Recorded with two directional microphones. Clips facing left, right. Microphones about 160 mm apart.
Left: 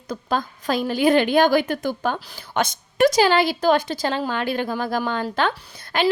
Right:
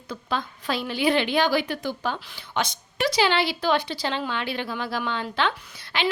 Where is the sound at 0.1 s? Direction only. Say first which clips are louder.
Left 5 dB; 45° left (ahead or behind).